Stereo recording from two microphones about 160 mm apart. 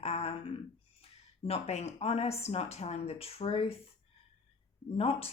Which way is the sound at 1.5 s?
40° left (ahead or behind).